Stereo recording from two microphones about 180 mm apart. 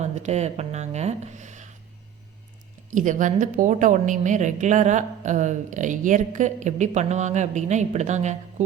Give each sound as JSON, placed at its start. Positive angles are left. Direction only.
{"t": 0.0, "sound": "speech", "side_deg": -40}
{"t": 2.9, "sound": "a woman's voice", "side_deg": -45}